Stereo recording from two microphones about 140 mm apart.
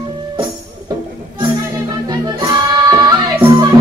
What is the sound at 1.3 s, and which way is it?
Music, 30° right (ahead or behind).